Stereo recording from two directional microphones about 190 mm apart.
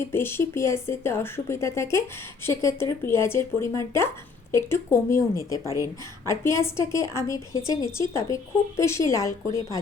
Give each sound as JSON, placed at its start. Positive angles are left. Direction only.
{"t": 0.0, "sound": "speech", "side_deg": 10}
{"t": 5.6, "sound": "a woman's voice", "side_deg": -15}
{"t": 6.2, "sound": "speech", "side_deg": 15}